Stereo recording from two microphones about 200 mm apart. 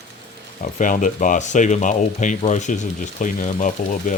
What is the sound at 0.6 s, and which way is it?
Speech, 40° left (ahead or behind).